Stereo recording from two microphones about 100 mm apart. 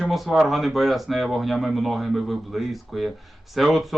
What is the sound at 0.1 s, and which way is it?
Speech, centre (ahead or behind).